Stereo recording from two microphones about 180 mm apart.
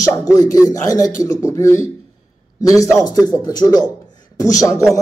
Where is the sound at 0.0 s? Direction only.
20° left (ahead or behind).